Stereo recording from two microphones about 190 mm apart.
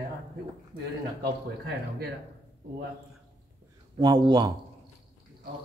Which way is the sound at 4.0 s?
25° right (ahead or behind).